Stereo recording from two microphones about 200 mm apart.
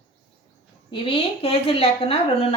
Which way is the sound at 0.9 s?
25° left (ahead or behind).